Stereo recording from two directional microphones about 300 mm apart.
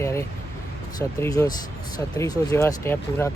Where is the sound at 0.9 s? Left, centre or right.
Centre.